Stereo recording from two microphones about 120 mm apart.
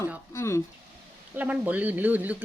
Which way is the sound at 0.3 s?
25° left (ahead or behind).